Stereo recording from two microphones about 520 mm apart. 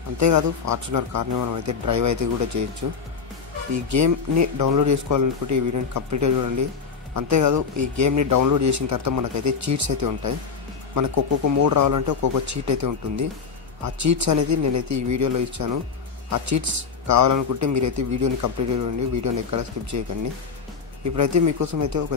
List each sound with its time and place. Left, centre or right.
0.2 s speech: right
21.0 s speech: right